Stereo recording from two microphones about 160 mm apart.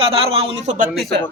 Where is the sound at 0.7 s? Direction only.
60° right (ahead or behind).